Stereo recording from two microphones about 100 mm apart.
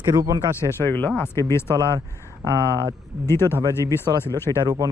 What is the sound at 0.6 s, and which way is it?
Speech, 25° left (ahead or behind).